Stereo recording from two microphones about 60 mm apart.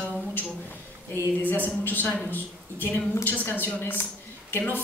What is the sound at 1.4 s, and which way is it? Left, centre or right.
A woman's voice, left.